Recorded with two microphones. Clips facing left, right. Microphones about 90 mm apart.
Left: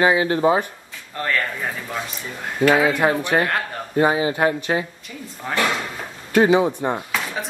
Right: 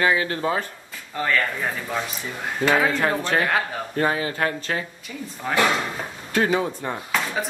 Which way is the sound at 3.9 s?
15° left (ahead or behind).